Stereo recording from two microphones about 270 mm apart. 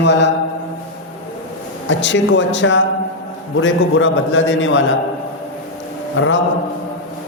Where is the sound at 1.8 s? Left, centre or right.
Left.